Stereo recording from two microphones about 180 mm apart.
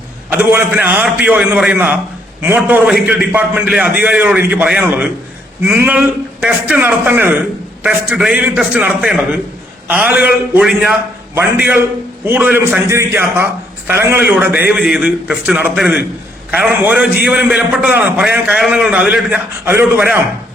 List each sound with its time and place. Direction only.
0.3 s a man's voice: 10° right (ahead or behind)